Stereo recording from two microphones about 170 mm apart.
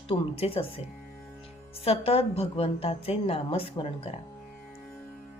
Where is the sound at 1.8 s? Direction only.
35° left (ahead or behind).